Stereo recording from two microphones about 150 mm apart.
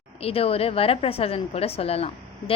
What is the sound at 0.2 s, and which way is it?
A woman's voice, 40° left (ahead or behind).